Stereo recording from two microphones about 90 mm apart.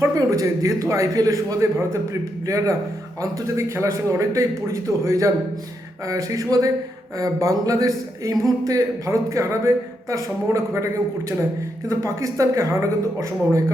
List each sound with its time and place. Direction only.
0.0 s speech: 35° right (ahead or behind)
3.2 s speech: 35° right (ahead or behind)
11.9 s speech: 35° right (ahead or behind)